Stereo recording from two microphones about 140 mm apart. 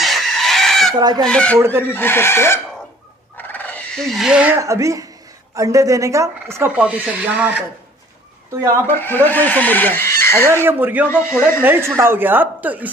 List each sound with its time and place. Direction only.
0.0 s chicken: centre (ahead or behind)
0.9 s frog: 30° right (ahead or behind)
1.2 s speech: 5° left (ahead or behind)
1.6 s a woman's voice: 15° right (ahead or behind)
1.9 s speech: 15° left (ahead or behind)
3.3 s fowl: 10° left (ahead or behind); by 4.5 s 5° right (ahead or behind)
4.6 s frog: 20° right (ahead or behind)
8.8 s speech: 15° left (ahead or behind)
10.6 s a woman's voice: 15° right (ahead or behind)
11.2 s speech: 20° left (ahead or behind)
11.6 s a woman's voice: 15° right (ahead or behind)